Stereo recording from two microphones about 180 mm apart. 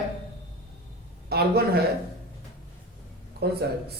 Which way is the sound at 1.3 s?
60° right (ahead or behind).